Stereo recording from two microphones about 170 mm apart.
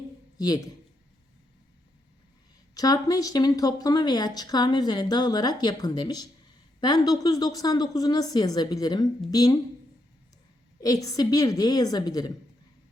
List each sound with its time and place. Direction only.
0.3 s a man's voice: 25° left (ahead or behind)
2.7 s a woman's voice: 20° left (ahead or behind)
10.8 s a woman's voice: 20° left (ahead or behind)